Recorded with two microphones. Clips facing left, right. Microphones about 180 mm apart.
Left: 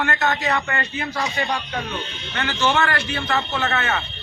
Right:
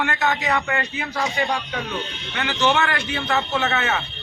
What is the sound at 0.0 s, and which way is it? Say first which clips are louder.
A man's voice: even; 10° right (ahead or behind).